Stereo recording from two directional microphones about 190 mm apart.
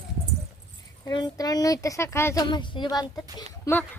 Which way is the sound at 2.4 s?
25° left (ahead or behind).